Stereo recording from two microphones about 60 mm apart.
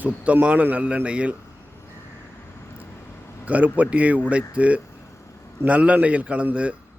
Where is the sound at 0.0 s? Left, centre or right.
Right.